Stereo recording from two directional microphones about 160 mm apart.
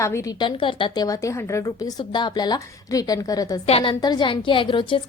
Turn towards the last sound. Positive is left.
turn(degrees=30)  # may be behind; listen again after turning